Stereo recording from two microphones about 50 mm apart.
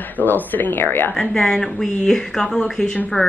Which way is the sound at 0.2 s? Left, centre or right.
Left.